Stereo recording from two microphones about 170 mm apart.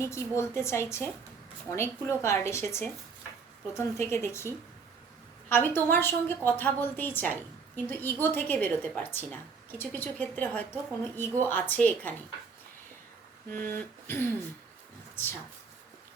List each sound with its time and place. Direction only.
0.0 s a woman's voice: 15° left (ahead or behind)
5.5 s a woman's voice: 10° left (ahead or behind)
13.5 s a woman's voice: 10° left (ahead or behind)